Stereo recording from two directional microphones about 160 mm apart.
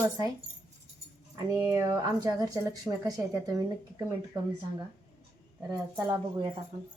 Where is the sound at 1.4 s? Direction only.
20° right (ahead or behind).